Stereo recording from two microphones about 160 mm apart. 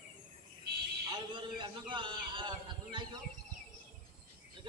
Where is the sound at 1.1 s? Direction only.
30° right (ahead or behind).